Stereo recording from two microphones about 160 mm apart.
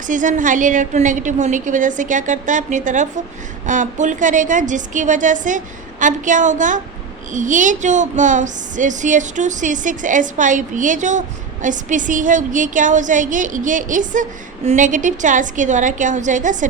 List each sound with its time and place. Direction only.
0.1 s a woman's voice: 55° right (ahead or behind)